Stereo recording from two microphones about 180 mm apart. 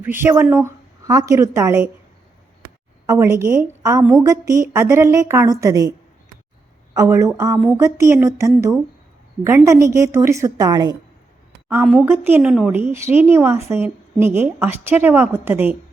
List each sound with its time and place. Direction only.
0.0 s a woman's voice: 10° right (ahead or behind)
3.1 s a woman's voice: 15° right (ahead or behind)
6.9 s a woman's voice: 15° right (ahead or behind)
9.4 s a woman's voice: 15° right (ahead or behind)
12.0 s a woman's voice: 10° right (ahead or behind)